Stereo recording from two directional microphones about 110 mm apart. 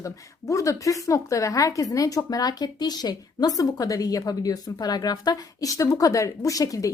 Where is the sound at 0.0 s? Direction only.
30° left (ahead or behind).